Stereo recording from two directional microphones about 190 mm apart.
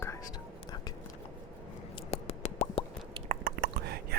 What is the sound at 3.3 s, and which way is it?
Chewing, 55° right (ahead or behind).